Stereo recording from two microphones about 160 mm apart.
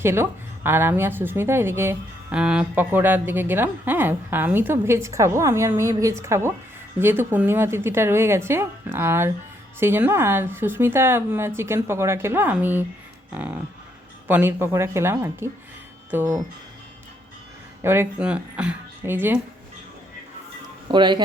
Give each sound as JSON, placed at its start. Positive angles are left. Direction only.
{"t": 0.0, "sound": "speech", "side_deg": -15}
{"t": 17.8, "sound": "speech", "side_deg": -15}
{"t": 20.8, "sound": "speech", "side_deg": -30}